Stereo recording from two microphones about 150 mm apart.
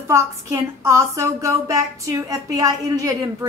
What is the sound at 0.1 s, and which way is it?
A woman's voice, 20° right (ahead or behind).